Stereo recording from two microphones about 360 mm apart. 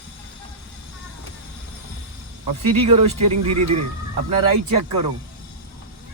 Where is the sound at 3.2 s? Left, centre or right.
Right.